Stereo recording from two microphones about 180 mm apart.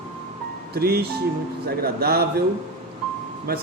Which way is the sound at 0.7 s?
60° right (ahead or behind).